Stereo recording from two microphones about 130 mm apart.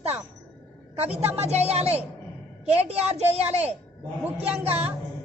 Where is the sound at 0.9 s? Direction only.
50° right (ahead or behind).